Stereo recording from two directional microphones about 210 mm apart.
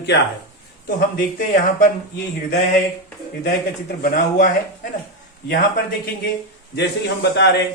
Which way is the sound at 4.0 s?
40° left (ahead or behind).